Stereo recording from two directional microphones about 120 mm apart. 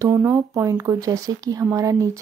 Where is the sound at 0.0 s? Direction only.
25° right (ahead or behind).